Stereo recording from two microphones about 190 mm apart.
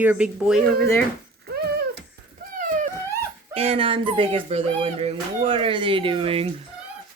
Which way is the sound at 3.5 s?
30° right (ahead or behind).